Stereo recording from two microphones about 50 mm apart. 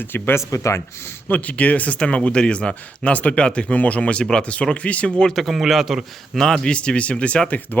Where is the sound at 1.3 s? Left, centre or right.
Left.